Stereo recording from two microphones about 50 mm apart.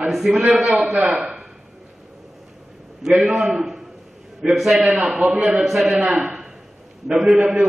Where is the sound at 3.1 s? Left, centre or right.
Right.